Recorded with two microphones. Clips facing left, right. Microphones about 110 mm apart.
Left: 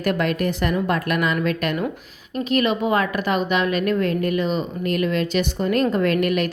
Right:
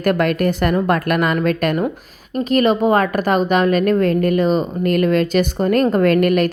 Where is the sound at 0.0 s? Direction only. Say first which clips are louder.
Right 5 dB; 50° right (ahead or behind).